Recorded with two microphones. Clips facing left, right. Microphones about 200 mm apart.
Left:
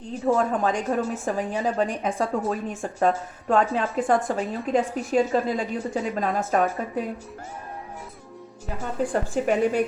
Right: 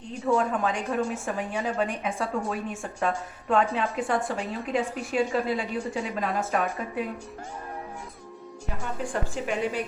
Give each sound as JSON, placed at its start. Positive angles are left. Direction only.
{"t": 0.3, "sound": "a woman's voice", "side_deg": 40}
{"t": 9.0, "sound": "a woman's voice", "side_deg": 40}